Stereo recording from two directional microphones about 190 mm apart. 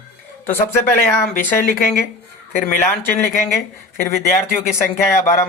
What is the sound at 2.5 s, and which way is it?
Speech, 45° left (ahead or behind).